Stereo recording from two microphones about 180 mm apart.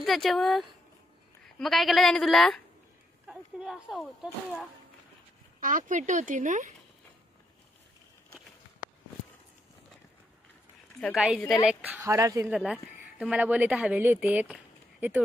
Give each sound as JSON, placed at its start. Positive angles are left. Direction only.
{"t": 0.0, "sound": "a woman's voice", "side_deg": 0}
{"t": 3.3, "sound": "a sound", "side_deg": -5}
{"t": 4.2, "sound": "a woman's voice", "side_deg": -5}
{"t": 5.6, "sound": "speech", "side_deg": -45}
{"t": 11.1, "sound": "a woman's voice", "side_deg": -5}
{"t": 12.4, "sound": "a woman's voice", "side_deg": -5}